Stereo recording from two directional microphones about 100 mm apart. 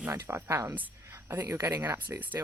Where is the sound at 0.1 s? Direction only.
30° right (ahead or behind).